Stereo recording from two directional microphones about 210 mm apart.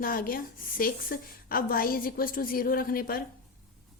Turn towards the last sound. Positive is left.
turn(degrees=45)  # may be behind; listen again after turning